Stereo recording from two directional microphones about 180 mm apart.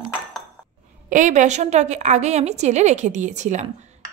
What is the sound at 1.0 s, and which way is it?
A woman's voice, 45° right (ahead or behind).